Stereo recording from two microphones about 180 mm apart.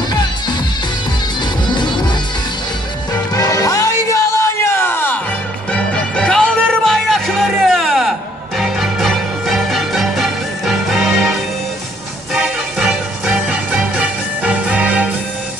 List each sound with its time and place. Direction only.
1.7 s music: 25° left (ahead or behind)
3.3 s music: 20° left (ahead or behind); by 11.3 s centre (ahead or behind)
12.4 s music: 5° right (ahead or behind)